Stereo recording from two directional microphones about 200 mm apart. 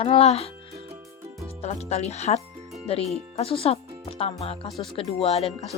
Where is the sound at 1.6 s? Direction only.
30° left (ahead or behind).